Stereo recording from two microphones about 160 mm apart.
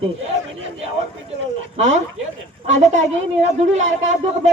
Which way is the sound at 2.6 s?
50° right (ahead or behind).